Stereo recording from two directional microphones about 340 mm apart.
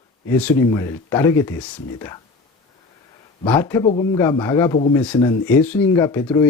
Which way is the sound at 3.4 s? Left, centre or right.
Centre.